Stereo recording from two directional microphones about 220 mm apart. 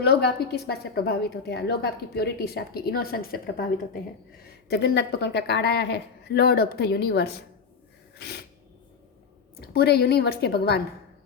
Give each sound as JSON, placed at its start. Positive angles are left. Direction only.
{"t": 0.0, "sound": "a woman's voice", "side_deg": 50}
{"t": 4.7, "sound": "a woman's voice", "side_deg": 50}
{"t": 9.6, "sound": "a woman's voice", "side_deg": 45}